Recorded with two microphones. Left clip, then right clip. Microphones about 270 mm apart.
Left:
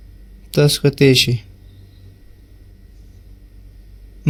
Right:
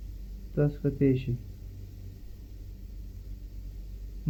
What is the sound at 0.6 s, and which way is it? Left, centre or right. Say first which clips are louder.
Speech: left 14 dB; left.